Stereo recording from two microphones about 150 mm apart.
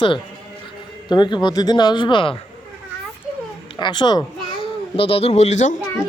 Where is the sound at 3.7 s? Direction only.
30° left (ahead or behind); by 5.8 s 50° left (ahead or behind).